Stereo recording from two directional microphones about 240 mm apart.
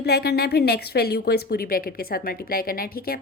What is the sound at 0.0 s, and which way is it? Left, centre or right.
A woman's voice, left.